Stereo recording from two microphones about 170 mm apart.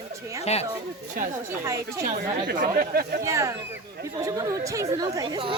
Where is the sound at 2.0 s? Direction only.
55° right (ahead or behind).